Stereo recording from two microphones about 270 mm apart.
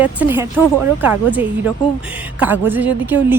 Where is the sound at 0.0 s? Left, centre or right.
Centre.